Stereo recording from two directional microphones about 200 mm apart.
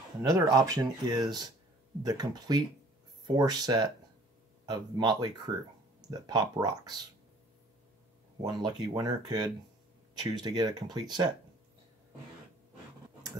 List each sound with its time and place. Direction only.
0.2 s speech: 20° right (ahead or behind)
8.4 s speech: 20° right (ahead or behind)